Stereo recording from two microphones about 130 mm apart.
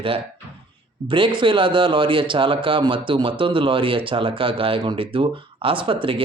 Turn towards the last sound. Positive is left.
turn(degrees=-40)  # may be behind; listen again after turning